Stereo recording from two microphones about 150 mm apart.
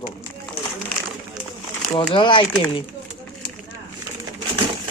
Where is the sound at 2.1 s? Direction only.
35° left (ahead or behind).